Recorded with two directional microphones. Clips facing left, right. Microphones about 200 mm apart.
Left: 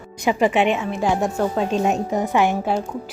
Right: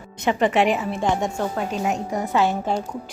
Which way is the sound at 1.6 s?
25° left (ahead or behind).